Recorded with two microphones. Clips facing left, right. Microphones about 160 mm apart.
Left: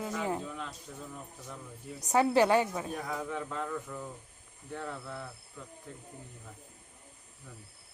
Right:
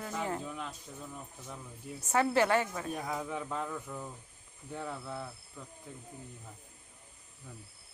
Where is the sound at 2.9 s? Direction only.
10° right (ahead or behind).